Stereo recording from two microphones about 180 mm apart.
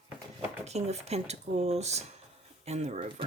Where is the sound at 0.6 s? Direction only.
35° right (ahead or behind).